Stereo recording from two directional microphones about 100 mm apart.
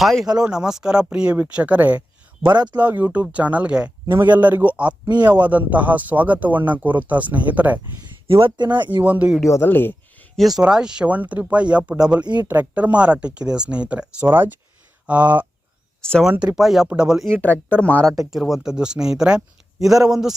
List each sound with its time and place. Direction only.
0.0 s a man's voice: 5° left (ahead or behind)
4.0 s a man's voice: 25° right (ahead or behind)
8.3 s speech: 60° right (ahead or behind)
8.7 s a man's voice: 15° right (ahead or behind)
9.5 s speech: 20° left (ahead or behind)
10.3 s a man's voice: centre (ahead or behind)
12.2 s speech: 45° right (ahead or behind)
12.5 s a man's voice: 15° right (ahead or behind)
16.0 s speech: 10° left (ahead or behind)
16.6 s a man's voice: 5° right (ahead or behind)
17.2 s speech: 10° left (ahead or behind)
18.3 s a man's voice: centre (ahead or behind)